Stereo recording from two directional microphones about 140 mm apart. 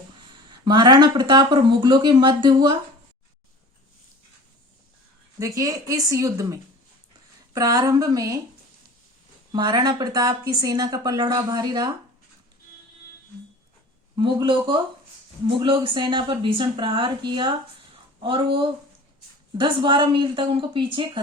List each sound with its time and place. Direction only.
0.6 s speech: 30° right (ahead or behind)
5.4 s speech: 25° right (ahead or behind)
9.5 s speech: 30° right (ahead or behind)
14.2 s speech: 35° right (ahead or behind)